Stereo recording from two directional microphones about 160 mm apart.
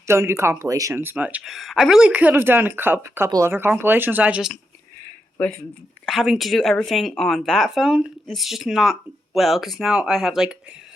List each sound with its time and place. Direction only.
0.1 s speech: 15° right (ahead or behind)
5.4 s speech: 10° left (ahead or behind)